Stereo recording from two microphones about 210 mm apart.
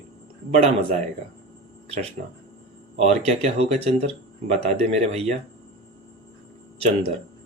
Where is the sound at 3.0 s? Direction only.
30° right (ahead or behind).